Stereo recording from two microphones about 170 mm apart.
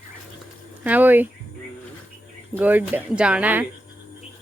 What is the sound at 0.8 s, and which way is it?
Speech, 10° right (ahead or behind).